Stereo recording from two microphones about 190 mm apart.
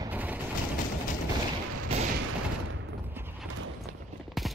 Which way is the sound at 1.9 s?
30° right (ahead or behind).